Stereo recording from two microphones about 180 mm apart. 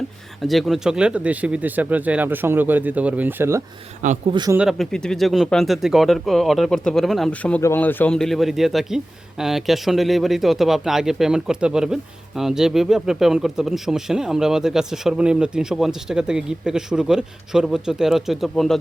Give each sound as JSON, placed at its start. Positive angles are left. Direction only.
{"t": 0.4, "sound": "speech", "side_deg": 0}
{"t": 4.3, "sound": "a man's voice", "side_deg": -25}
{"t": 4.5, "sound": "speech", "side_deg": 0}